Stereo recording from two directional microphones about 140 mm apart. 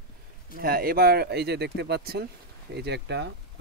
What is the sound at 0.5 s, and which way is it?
Speech, 90° right.